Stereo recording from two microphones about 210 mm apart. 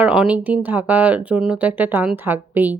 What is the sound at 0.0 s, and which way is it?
Speech, 5° right (ahead or behind).